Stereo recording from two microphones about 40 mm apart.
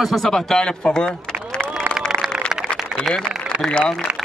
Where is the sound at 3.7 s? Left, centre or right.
Left.